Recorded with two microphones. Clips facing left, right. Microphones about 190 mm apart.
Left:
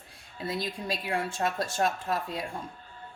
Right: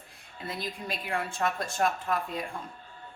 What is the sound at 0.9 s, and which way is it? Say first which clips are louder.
A woman's voice: left 1 dB; 30° left (ahead or behind).